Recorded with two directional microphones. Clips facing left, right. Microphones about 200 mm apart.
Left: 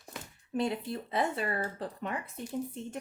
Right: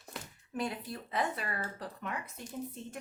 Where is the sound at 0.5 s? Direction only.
25° left (ahead or behind).